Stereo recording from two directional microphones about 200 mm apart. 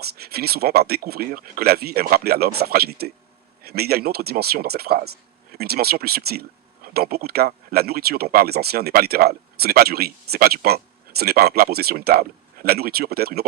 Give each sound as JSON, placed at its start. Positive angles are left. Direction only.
{"t": 0.0, "sound": "speech", "side_deg": -50}